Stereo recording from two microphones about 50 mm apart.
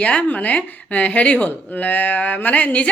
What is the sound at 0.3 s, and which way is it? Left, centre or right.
Speech, left.